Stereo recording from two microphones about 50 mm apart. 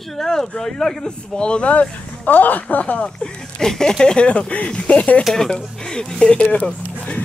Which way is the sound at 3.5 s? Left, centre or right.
Centre.